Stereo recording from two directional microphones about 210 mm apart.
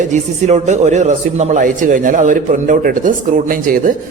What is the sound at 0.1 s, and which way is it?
A man's voice, 35° right (ahead or behind).